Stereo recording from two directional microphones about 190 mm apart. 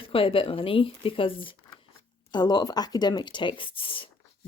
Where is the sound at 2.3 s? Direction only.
20° left (ahead or behind).